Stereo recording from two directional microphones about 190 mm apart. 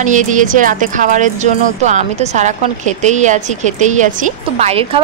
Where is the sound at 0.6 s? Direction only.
45° right (ahead or behind).